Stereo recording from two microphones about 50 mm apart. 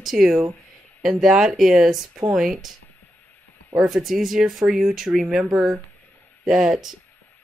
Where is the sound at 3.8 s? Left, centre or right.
Centre.